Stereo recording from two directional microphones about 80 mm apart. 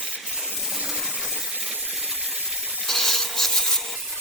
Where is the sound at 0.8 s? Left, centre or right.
Centre.